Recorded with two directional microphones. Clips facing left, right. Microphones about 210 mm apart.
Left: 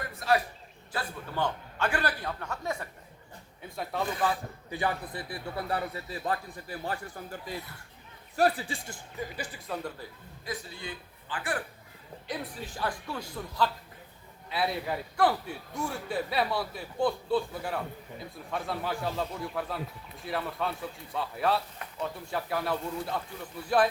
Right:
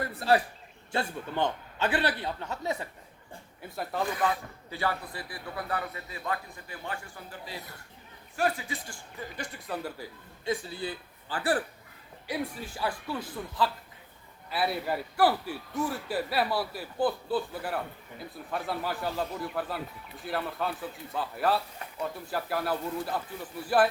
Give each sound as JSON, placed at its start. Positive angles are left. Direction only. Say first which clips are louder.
{"t": 0.1, "sound": "a sound", "louder": "right 1 dB", "side_deg": -30}
{"t": 0.9, "sound": "a man's voice", "louder": "right 3 dB", "side_deg": -20}
{"t": 3.9, "sound": "speech", "louder": "right 1 dB", "side_deg": 0}
{"t": 4.7, "sound": "a man's voice", "louder": "left 1 dB", "side_deg": 20}
{"t": 9.4, "sound": "speech", "louder": "right 4 dB", "side_deg": 0}
{"t": 10.4, "sound": "a man's voice", "louder": "right 6 dB", "side_deg": -30}
{"t": 12.3, "sound": "speech", "louder": "right 3 dB", "side_deg": -5}